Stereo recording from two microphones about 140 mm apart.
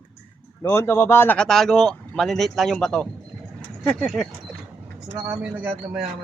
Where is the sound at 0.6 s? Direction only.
20° left (ahead or behind); by 4.3 s 5° left (ahead or behind).